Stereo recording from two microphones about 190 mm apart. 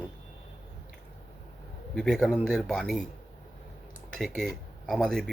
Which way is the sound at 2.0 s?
Centre (ahead or behind).